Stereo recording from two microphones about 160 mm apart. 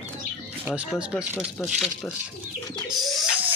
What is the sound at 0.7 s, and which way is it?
A man's voice, 10° right (ahead or behind).